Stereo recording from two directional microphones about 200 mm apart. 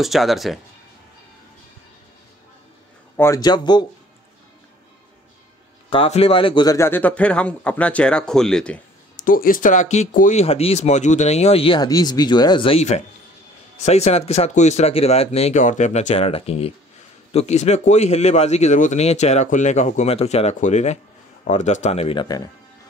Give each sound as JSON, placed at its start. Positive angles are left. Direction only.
{"t": 0.0, "sound": "speech", "side_deg": 0}
{"t": 3.2, "sound": "speech", "side_deg": 15}
{"t": 5.9, "sound": "a man's voice", "side_deg": 30}
{"t": 9.2, "sound": "speech", "side_deg": 45}